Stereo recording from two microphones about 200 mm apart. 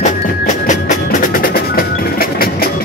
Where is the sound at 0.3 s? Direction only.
45° left (ahead or behind).